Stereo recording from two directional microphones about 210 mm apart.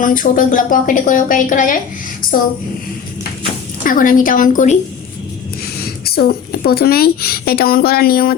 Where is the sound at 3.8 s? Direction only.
40° left (ahead or behind).